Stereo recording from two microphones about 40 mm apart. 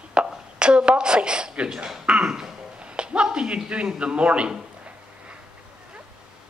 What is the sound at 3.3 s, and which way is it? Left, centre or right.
A man's voice, right.